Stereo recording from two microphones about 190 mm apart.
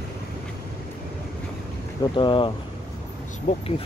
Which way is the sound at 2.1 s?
25° left (ahead or behind).